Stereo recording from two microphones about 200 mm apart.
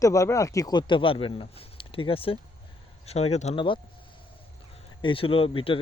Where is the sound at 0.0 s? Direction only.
15° left (ahead or behind).